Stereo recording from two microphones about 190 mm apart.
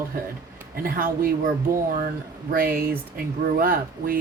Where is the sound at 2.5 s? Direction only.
50° right (ahead or behind).